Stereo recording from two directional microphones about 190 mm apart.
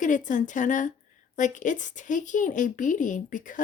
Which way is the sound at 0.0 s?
40° left (ahead or behind).